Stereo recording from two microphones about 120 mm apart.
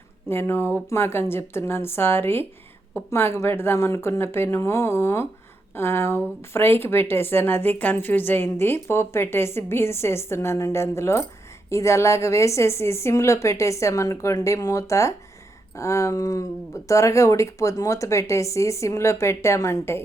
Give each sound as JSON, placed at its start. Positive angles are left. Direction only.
{"t": 0.3, "sound": "a woman's voice", "side_deg": 20}